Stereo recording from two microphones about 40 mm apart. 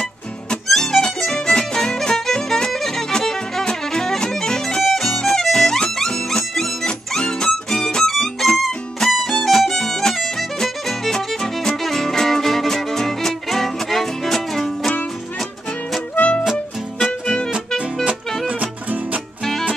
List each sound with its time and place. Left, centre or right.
0.7 s music: centre
8.1 s music: centre
16.2 s music: left
18.5 s music: right